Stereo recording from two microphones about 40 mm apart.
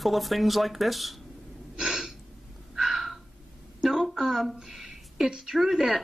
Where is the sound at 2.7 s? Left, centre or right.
Centre.